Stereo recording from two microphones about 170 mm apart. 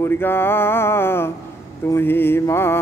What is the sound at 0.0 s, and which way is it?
Mantra, 15° left (ahead or behind).